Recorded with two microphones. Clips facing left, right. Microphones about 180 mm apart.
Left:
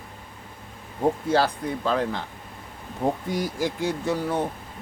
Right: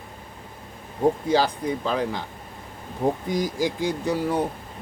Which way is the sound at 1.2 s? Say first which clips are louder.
Right 1 dB; 15° right (ahead or behind).